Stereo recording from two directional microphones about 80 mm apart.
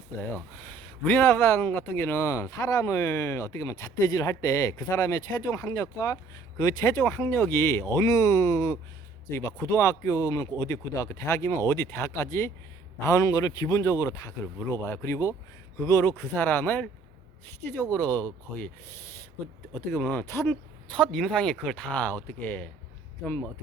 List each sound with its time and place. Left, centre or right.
0.5 s speech: left
4.1 s speech: left
13.7 s speech: left
16.4 s speech: left
17.9 s speech: left
19.7 s speech: left
20.9 s speech: centre